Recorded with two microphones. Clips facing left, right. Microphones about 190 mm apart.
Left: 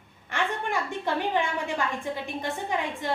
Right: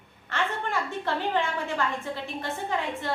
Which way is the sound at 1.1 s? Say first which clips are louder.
Left 1 dB; 15° left (ahead or behind).